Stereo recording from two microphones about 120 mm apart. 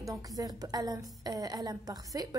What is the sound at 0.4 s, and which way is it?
A woman's voice, 30° right (ahead or behind).